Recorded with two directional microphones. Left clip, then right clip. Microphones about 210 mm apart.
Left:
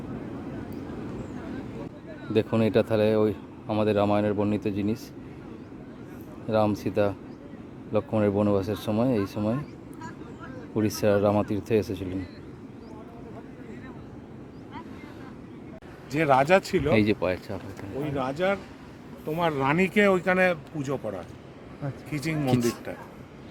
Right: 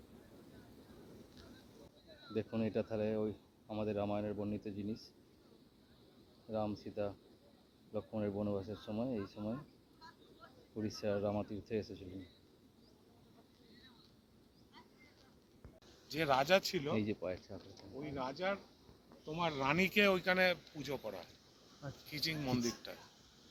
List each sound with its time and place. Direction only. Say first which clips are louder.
2.3 s speech: left 16 dB; 10° left (ahead or behind)
6.5 s speech: left 16 dB; 10° left (ahead or behind)
10.8 s speech: left 15 dB; 5° left (ahead or behind)
16.1 s speech: left 11 dB; 5° right (ahead or behind)
16.9 s speech: left 16 dB; 15° left (ahead or behind)
18.2 s speech: left 12 dB; 10° right (ahead or behind)
19.4 s speech: left 10 dB; 35° right (ahead or behind)
19.9 s speech: left 10 dB; 5° right (ahead or behind)